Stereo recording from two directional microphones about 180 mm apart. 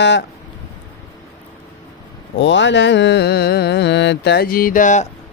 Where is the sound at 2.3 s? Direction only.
90° left; by 5.0 s 45° left (ahead or behind).